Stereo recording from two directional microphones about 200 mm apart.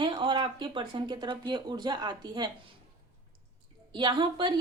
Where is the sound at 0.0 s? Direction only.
25° right (ahead or behind).